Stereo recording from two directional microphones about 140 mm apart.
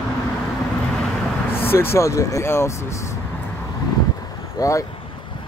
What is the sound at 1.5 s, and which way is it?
Speech, 15° left (ahead or behind).